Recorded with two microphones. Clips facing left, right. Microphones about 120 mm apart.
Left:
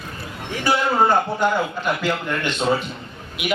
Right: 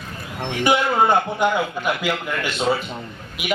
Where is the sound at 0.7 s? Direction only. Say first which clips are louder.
Even; 20° right (ahead or behind).